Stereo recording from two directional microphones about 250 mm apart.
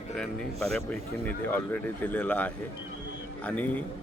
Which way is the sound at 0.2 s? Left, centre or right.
Centre.